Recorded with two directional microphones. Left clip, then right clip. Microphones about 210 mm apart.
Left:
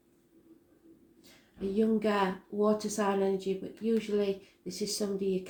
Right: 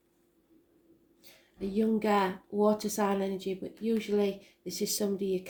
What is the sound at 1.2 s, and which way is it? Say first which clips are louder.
Speech: left 1 dB; 45° right (ahead or behind).